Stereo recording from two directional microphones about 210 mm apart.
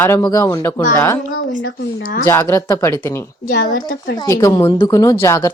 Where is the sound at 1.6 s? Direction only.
50° left (ahead or behind).